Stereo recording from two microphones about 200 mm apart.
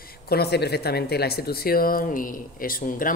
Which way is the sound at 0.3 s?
55° left (ahead or behind).